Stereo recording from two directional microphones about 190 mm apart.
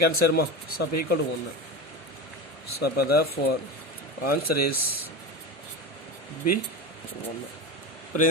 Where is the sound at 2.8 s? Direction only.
55° left (ahead or behind).